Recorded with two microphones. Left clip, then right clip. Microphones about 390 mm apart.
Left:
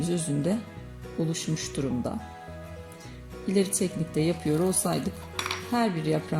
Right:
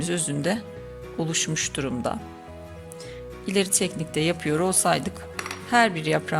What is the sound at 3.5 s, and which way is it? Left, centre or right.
A woman's voice, right.